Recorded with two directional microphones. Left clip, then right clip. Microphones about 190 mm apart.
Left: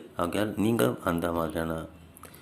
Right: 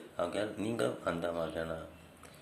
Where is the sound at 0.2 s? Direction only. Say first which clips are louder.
Left 6 dB; 25° left (ahead or behind).